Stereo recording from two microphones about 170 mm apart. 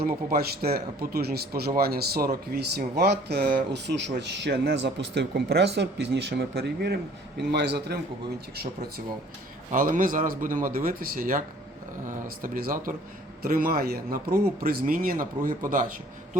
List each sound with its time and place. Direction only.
0.0 s a man's voice: 65° right (ahead or behind); by 7.9 s 85° right
9.7 s speech: 55° right (ahead or behind)